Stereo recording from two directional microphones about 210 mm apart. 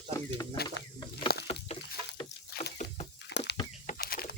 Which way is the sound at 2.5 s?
45° left (ahead or behind).